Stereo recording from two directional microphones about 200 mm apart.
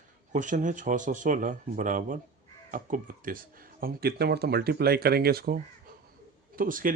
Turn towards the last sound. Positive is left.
turn(degrees=-45)  # may be behind; listen again after turning